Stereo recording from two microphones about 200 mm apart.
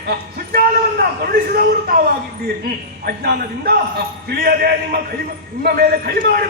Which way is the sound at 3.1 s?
50° right (ahead or behind).